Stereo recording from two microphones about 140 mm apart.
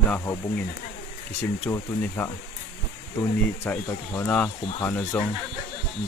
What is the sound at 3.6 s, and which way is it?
Speech, 15° left (ahead or behind).